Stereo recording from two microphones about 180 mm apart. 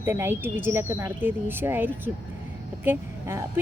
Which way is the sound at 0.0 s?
15° right (ahead or behind).